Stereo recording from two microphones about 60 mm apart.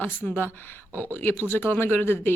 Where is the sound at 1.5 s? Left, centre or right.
Left.